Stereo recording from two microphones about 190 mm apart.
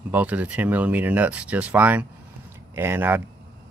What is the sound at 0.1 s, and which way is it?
Speech, 10° right (ahead or behind).